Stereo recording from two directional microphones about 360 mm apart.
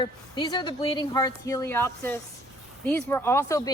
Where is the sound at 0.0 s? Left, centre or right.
Centre.